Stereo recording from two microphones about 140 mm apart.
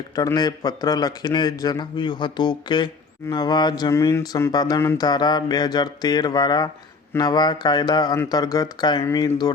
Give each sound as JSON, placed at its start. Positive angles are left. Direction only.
{"t": 0.2, "sound": "a man's voice", "side_deg": 30}